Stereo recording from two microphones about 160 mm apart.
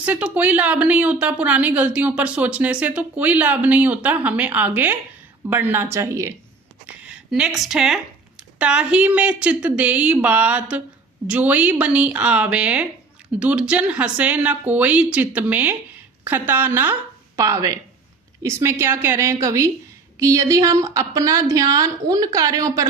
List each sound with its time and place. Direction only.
0.0 s speech: 10° right (ahead or behind)
6.8 s a woman's voice: 5° right (ahead or behind)